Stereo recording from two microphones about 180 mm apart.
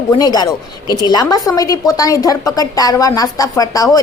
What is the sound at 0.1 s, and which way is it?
A woman's voice, 20° left (ahead or behind).